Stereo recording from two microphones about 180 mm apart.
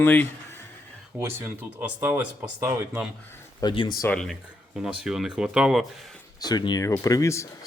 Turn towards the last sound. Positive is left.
turn(degrees=15)  # may be behind; listen again after turning